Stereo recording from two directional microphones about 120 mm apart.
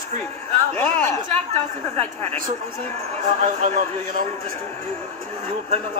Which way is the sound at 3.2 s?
90° right.